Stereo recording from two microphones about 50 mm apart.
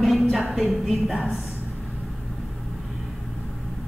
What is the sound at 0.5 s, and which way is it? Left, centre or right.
Speech, centre.